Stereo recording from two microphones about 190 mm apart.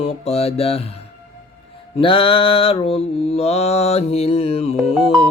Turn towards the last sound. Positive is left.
turn(degrees=0)  # may be behind; listen again after turning